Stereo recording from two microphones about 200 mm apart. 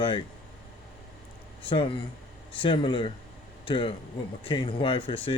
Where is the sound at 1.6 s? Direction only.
25° left (ahead or behind).